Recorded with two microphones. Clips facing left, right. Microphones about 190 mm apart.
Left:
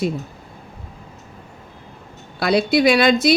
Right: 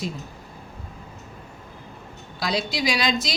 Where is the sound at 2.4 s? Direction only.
60° left (ahead or behind).